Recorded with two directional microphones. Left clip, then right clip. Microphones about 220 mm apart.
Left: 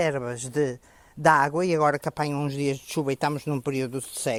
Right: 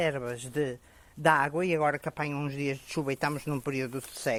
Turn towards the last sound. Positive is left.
turn(degrees=50)  # may be behind; listen again after turning